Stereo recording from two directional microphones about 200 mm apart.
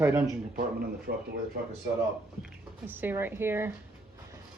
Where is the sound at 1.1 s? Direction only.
55° right (ahead or behind).